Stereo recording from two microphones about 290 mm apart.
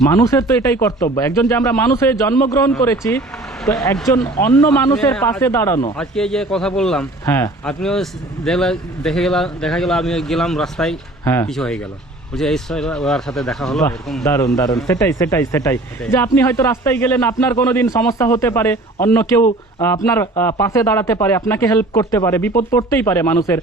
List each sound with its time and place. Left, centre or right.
0.0 s a man's voice: centre